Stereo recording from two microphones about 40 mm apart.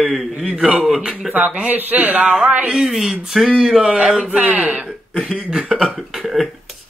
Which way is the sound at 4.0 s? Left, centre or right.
Right.